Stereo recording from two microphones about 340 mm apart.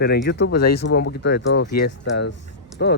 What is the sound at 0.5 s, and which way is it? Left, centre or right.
Speech, left.